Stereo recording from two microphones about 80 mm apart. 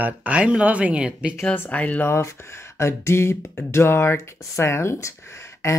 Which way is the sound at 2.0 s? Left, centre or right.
Left.